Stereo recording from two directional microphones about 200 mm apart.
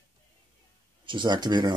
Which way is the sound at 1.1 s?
25° right (ahead or behind).